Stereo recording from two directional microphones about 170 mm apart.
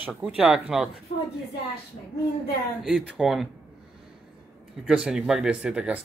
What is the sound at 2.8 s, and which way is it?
Speech, centre (ahead or behind).